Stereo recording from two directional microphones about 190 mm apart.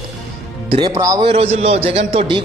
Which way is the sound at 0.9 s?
15° right (ahead or behind).